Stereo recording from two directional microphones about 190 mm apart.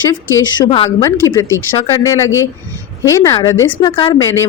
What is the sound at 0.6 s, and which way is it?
Speech, 25° left (ahead or behind).